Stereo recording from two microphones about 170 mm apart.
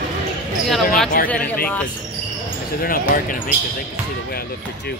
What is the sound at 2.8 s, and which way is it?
Speech, 55° left (ahead or behind).